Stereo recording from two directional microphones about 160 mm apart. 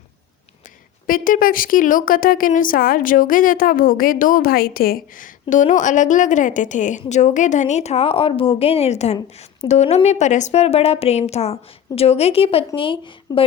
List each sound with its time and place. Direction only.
1.0 s a woman's voice: 60° left (ahead or behind); by 13.4 s 35° left (ahead or behind)